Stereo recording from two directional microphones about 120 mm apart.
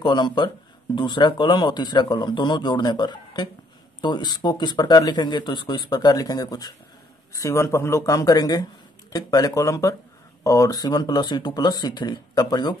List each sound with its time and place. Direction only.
0.0 s speech: 40° left (ahead or behind)